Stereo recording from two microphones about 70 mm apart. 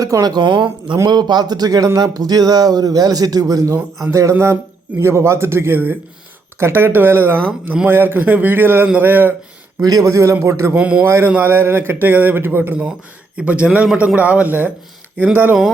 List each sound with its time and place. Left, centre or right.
0.0 s speech: right
4.0 s a sound: right
4.9 s speech: right
9.8 s a sound: right
10.8 s speech: centre
11.0 s speech: right